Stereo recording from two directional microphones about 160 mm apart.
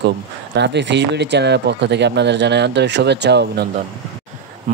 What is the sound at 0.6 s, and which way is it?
Speech, 90° right.